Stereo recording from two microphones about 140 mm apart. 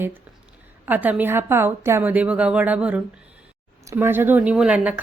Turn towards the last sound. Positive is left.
turn(degrees=-5)  # may be behind; listen again after turning